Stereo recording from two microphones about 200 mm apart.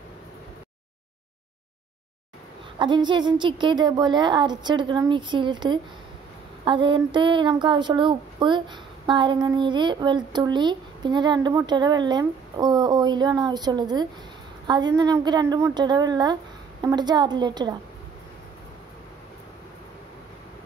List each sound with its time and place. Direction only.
2.8 s speech: 25° right (ahead or behind)